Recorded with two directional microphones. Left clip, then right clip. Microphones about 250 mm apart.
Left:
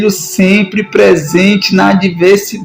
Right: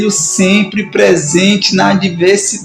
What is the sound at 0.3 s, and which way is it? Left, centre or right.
Speech, left.